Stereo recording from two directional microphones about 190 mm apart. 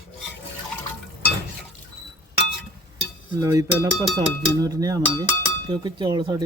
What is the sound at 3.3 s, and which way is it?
Speech, 20° right (ahead or behind).